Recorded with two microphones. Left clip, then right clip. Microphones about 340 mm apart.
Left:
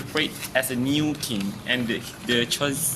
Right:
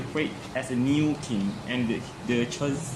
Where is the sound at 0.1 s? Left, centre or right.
Left.